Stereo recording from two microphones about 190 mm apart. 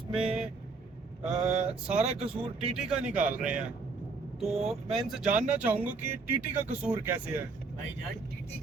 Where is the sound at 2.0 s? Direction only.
35° right (ahead or behind).